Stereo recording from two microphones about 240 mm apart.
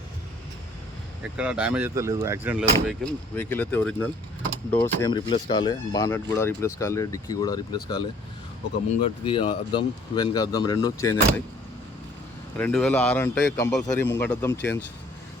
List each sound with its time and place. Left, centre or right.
1.4 s speech: centre
2.8 s speech: centre
12.5 s speech: centre